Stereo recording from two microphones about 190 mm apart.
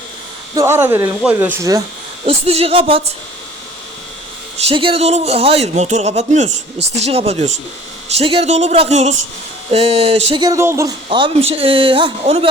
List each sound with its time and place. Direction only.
0.5 s speech: 15° right (ahead or behind)
2.2 s a man's voice: 30° right (ahead or behind)
4.5 s a man's voice: 30° right (ahead or behind)